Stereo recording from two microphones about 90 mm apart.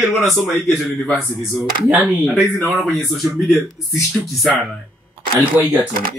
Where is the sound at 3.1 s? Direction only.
Centre (ahead or behind).